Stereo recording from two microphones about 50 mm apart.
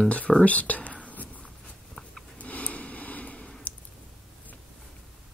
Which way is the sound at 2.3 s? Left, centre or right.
Left.